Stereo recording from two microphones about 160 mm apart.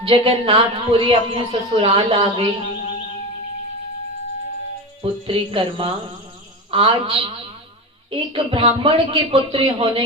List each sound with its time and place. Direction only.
0.0 s speech: 35° right (ahead or behind)
5.2 s speech: 35° right (ahead or behind)